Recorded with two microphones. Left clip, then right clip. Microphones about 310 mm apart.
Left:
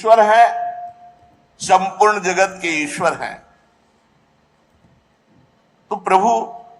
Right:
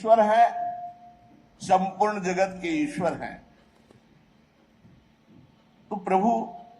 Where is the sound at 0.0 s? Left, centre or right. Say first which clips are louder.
Left 8 dB; left.